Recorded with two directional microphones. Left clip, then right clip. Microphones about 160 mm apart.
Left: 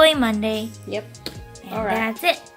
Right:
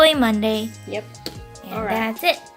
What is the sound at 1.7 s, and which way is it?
Speech, 25° left (ahead or behind).